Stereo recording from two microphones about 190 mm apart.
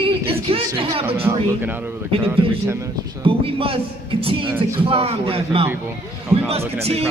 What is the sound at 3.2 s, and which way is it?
Speech, 30° right (ahead or behind).